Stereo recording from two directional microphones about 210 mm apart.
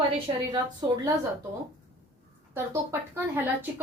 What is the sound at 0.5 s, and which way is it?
Speech, 20° right (ahead or behind).